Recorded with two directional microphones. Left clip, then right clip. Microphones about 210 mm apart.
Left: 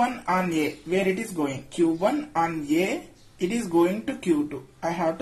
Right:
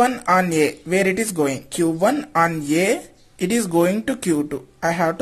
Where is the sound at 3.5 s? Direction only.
45° right (ahead or behind).